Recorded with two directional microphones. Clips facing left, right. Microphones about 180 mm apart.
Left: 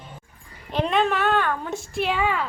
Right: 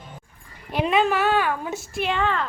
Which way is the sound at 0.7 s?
5° right (ahead or behind).